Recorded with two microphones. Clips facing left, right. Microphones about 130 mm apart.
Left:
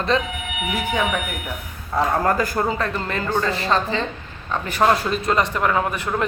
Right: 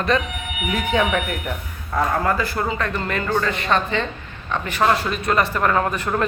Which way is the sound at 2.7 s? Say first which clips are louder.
Even; 30° left (ahead or behind).